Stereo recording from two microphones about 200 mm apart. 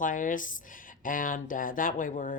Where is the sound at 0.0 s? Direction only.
40° left (ahead or behind).